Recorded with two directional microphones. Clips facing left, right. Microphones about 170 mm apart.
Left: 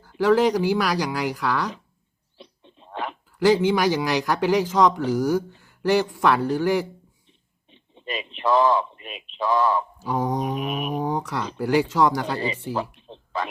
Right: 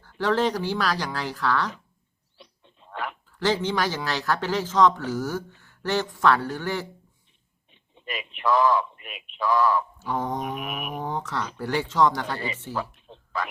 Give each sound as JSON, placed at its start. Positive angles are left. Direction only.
{"t": 0.0, "sound": "speech", "side_deg": 10}
{"t": 2.4, "sound": "dog", "side_deg": 20}
{"t": 3.3, "sound": "speech", "side_deg": 10}
{"t": 7.7, "sound": "a man's voice", "side_deg": 25}
{"t": 10.0, "sound": "speech", "side_deg": 10}
{"t": 10.4, "sound": "mantra", "side_deg": 25}
{"t": 10.9, "sound": "speech", "side_deg": 10}
{"t": 12.7, "sound": "a sound", "side_deg": 25}